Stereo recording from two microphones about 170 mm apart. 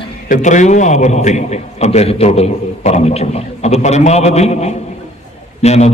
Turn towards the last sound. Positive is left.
turn(degrees=40)  # may be behind; listen again after turning